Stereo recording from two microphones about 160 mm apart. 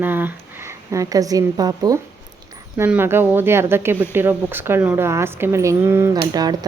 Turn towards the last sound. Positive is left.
turn(degrees=-25)  # may be behind; listen again after turning